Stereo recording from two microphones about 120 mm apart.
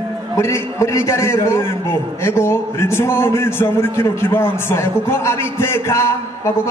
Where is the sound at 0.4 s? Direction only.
25° left (ahead or behind).